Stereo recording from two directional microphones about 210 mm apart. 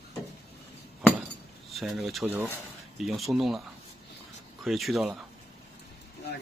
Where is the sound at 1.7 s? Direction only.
Centre (ahead or behind).